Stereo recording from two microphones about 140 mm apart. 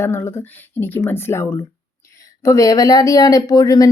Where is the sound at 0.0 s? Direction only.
15° left (ahead or behind).